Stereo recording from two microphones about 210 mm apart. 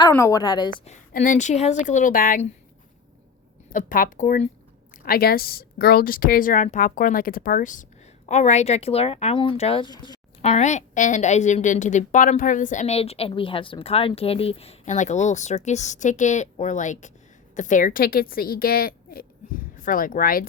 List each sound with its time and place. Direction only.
0.1 s a woman's voice: 15° left (ahead or behind)
0.9 s a woman's voice: 35° left (ahead or behind)
3.7 s a woman's voice: 40° left (ahead or behind); by 10.2 s 20° left (ahead or behind)
10.4 s a woman's voice: 35° left (ahead or behind)